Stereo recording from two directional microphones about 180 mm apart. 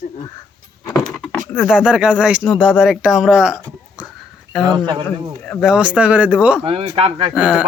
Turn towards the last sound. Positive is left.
turn(degrees=-5)  # may be behind; listen again after turning